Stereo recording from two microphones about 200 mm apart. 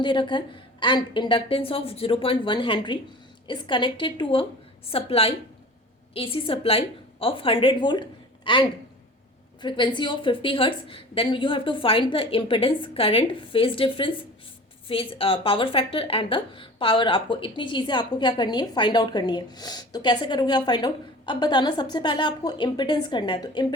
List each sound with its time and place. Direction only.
0.0 s speech: 25° left (ahead or behind)